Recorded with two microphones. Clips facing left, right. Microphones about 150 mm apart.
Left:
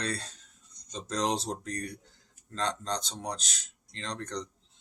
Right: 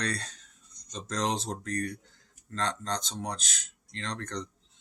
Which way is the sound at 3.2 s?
10° left (ahead or behind).